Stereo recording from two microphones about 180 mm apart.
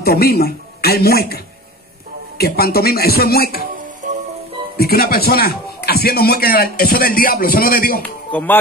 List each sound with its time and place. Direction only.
0.0 s speech: 60° left (ahead or behind)
4.0 s music: 45° right (ahead or behind)
4.7 s speech: 55° left (ahead or behind)
8.3 s speech: 10° left (ahead or behind)